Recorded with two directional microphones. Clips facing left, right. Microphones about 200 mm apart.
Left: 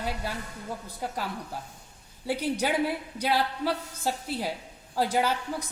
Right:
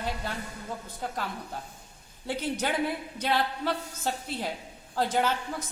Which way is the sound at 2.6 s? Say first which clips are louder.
Left 2 dB; 10° left (ahead or behind).